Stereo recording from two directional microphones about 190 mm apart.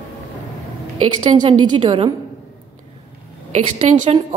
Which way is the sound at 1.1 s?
25° right (ahead or behind).